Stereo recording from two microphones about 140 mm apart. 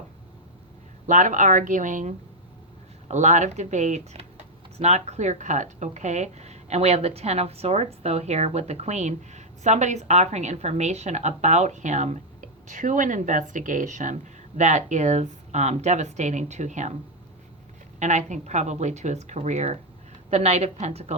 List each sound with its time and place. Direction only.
1.0 s speech: 65° right (ahead or behind)
18.0 s a woman's voice: 60° right (ahead or behind)